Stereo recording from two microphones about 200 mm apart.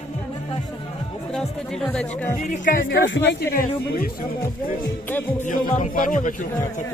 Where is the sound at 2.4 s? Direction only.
40° left (ahead or behind).